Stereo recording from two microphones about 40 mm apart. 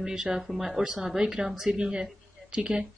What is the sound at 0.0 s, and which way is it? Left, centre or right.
A woman's voice, centre.